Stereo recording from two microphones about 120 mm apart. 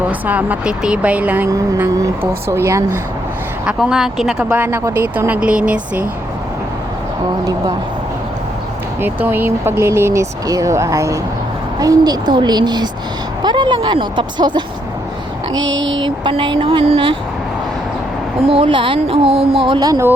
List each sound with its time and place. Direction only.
0.1 s speech: 15° right (ahead or behind)
1.5 s speech: 25° right (ahead or behind)
3.7 s speech: 5° right (ahead or behind)
4.5 s speech: 20° right (ahead or behind)
7.4 s speech: 30° right (ahead or behind)
9.0 s speech: 15° right (ahead or behind); by 12.9 s 35° right (ahead or behind)
13.4 s a sound: 40° right (ahead or behind)
16.0 s speech: 40° right (ahead or behind)
18.4 s speech: 50° right (ahead or behind); by 20.1 s 30° right (ahead or behind)